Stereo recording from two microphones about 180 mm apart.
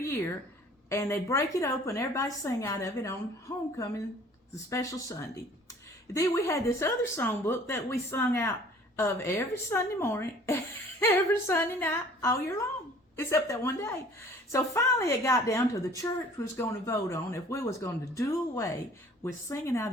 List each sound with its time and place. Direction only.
0.9 s a woman's voice: 15° left (ahead or behind)
4.5 s a woman's voice: 15° left (ahead or behind)